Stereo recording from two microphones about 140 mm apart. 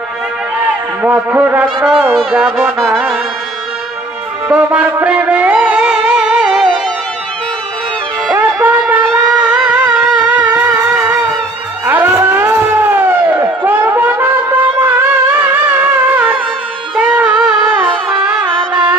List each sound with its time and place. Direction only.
1.0 s music: 10° right (ahead or behind)
4.5 s music: 10° right (ahead or behind)
8.3 s music: 15° right (ahead or behind)
18.5 s music: 35° right (ahead or behind)